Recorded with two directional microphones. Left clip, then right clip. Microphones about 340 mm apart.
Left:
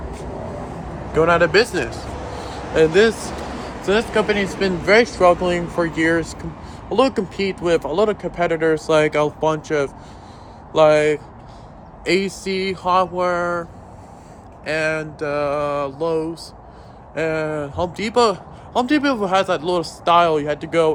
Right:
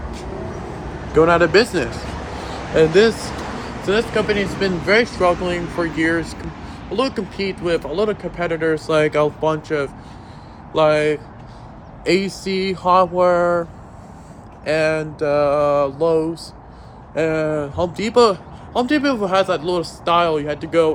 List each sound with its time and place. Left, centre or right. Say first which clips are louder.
1.1 s mantra: right 2 dB; centre
2.7 s speech: right 1 dB; centre
14.6 s mantra: right 3 dB; centre
17.2 s speech: right 3 dB; centre